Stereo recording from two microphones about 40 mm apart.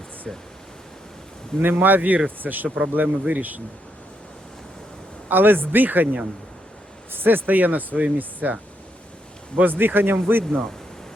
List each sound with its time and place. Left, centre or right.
0.3 s speech: centre
1.5 s speech: right
1.8 s speech: right
5.3 s speech: right
7.1 s speech: right
9.6 s speech: right